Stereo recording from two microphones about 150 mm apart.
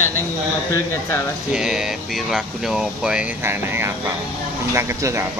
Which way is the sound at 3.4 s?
15° right (ahead or behind).